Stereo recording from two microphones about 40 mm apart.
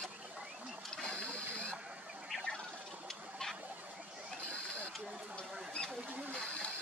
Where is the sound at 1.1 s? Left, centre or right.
Left.